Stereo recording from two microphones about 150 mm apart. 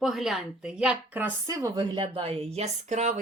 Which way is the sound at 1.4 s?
20° right (ahead or behind).